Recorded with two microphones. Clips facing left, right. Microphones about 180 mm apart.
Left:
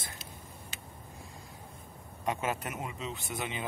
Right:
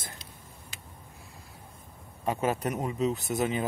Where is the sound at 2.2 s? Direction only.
35° right (ahead or behind).